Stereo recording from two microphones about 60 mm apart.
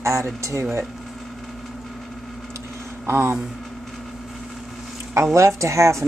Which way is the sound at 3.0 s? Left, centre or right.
Right.